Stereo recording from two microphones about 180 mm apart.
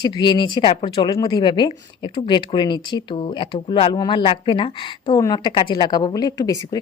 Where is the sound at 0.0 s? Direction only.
25° left (ahead or behind).